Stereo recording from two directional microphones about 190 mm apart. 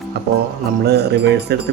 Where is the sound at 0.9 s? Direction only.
60° right (ahead or behind).